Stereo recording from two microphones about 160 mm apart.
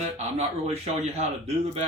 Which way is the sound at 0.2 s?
40° right (ahead or behind).